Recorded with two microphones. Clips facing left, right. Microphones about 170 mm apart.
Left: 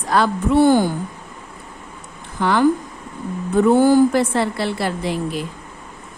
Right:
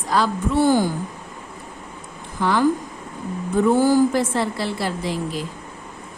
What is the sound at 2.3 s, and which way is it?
A woman's voice, 65° left (ahead or behind).